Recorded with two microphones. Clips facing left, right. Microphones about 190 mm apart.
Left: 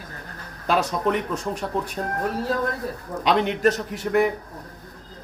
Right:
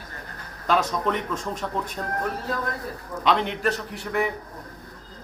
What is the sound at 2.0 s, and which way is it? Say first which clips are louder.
Speech: left 3 dB; 30° left (ahead or behind).